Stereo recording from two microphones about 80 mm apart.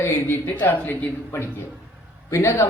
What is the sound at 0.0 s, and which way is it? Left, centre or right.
A man's voice, left.